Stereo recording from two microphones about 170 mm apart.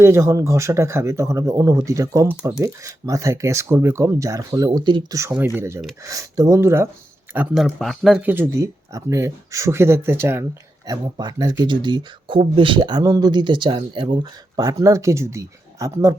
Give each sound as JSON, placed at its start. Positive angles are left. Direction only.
{"t": 0.0, "sound": "speech", "side_deg": -15}
{"t": 7.3, "sound": "speech", "side_deg": 0}